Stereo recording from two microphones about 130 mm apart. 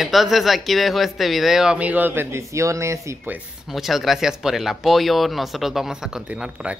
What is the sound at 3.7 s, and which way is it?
A woman's voice, centre (ahead or behind).